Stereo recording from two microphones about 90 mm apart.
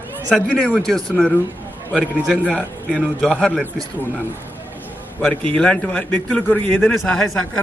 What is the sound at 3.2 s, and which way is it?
Speech, 10° left (ahead or behind).